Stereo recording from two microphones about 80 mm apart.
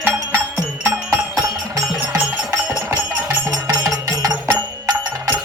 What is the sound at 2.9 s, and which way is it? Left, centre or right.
Music, right.